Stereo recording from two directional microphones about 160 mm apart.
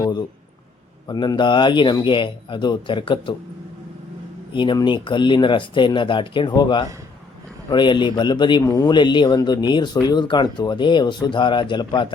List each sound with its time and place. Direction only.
0.0 s a sound: 25° left (ahead or behind)
1.0 s speech: 25° left (ahead or behind)
4.5 s speech: 30° left (ahead or behind)